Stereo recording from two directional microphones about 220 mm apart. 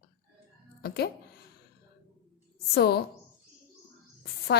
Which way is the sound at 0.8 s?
45° left (ahead or behind).